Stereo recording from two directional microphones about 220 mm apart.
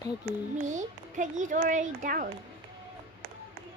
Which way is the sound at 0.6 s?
35° right (ahead or behind).